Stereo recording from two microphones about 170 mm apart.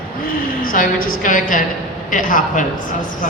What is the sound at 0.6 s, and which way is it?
A man's voice, 55° left (ahead or behind).